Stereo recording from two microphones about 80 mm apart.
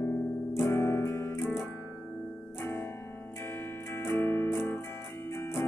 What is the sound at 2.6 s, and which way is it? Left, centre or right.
Music, left.